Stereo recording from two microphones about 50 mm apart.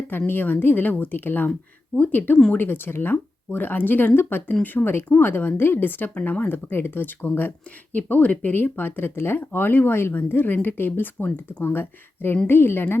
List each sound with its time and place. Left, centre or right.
0.3 s speech: left
5.1 s speech: left
7.9 s speech: left